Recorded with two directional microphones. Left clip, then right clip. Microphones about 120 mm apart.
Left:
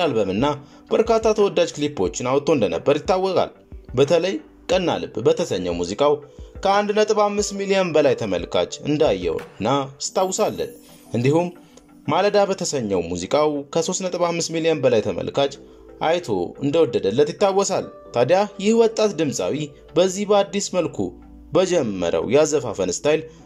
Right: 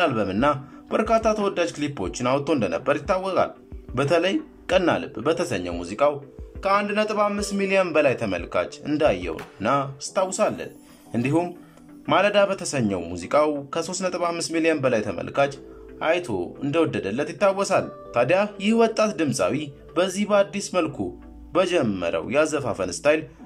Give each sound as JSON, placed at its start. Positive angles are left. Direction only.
{"t": 0.0, "sound": "a man's voice", "side_deg": 30}
{"t": 6.6, "sound": "speech", "side_deg": 55}
{"t": 12.1, "sound": "speech", "side_deg": 35}